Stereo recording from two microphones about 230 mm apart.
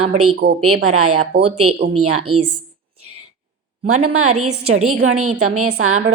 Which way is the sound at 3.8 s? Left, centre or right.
Right.